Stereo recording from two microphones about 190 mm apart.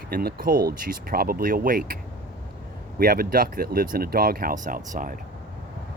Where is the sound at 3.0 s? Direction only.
50° right (ahead or behind).